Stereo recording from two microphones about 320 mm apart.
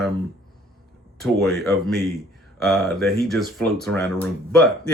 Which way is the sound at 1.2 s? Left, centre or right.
Centre.